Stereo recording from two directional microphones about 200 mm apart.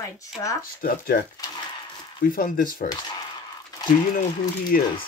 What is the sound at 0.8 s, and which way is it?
Speech, 45° left (ahead or behind).